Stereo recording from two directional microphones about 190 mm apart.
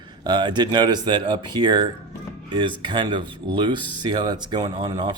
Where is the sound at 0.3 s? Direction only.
25° right (ahead or behind).